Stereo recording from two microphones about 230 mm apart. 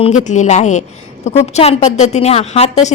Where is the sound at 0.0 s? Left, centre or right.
Left.